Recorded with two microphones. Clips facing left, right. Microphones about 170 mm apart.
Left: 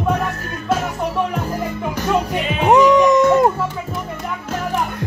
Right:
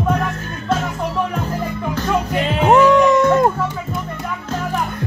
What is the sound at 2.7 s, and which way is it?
Music, 15° left (ahead or behind).